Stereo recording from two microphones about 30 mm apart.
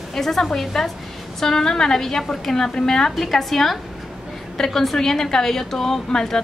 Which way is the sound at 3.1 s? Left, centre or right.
Centre.